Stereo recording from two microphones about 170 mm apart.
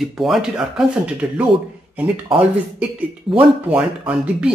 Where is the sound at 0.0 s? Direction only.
Centre (ahead or behind).